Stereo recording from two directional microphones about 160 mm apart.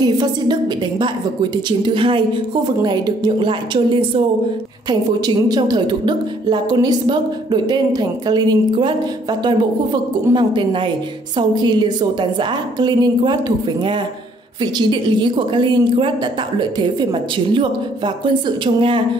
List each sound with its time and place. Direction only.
0.0 s a woman's voice: 25° right (ahead or behind)
14.6 s a woman's voice: 30° right (ahead or behind)